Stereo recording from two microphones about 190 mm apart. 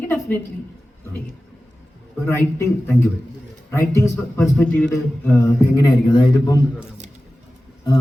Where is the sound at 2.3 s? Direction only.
15° left (ahead or behind).